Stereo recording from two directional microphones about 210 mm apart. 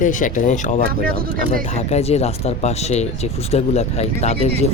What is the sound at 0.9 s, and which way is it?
Speech, 45° right (ahead or behind).